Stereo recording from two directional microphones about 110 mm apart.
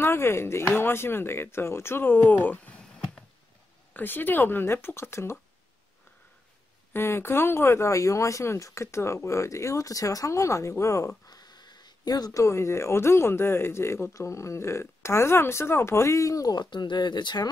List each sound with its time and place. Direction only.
0.0 s speech: 20° left (ahead or behind)
3.9 s speech: 20° left (ahead or behind)
6.9 s speech: 20° left (ahead or behind); by 12.3 s 35° left (ahead or behind)
12.3 s speech: 25° left (ahead or behind); by 17.5 s 45° left (ahead or behind)